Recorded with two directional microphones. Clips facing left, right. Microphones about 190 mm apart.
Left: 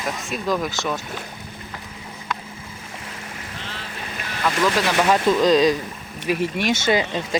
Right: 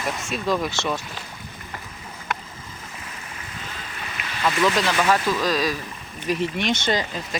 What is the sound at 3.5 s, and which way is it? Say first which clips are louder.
Boat: left 1 dB; 75° left (ahead or behind).